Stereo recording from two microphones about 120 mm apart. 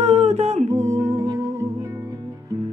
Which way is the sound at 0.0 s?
65° right (ahead or behind).